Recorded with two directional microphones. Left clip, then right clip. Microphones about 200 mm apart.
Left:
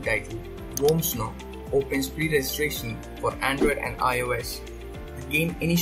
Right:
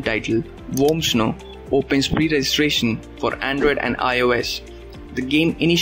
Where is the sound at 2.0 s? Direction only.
45° right (ahead or behind).